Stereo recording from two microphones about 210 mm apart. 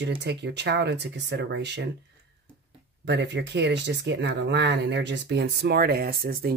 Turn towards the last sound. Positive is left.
turn(degrees=-45)  # may be behind; listen again after turning